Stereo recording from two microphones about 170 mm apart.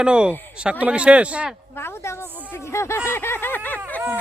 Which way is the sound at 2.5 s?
15° left (ahead or behind).